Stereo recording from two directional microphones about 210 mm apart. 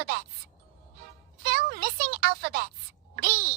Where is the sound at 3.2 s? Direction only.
45° right (ahead or behind).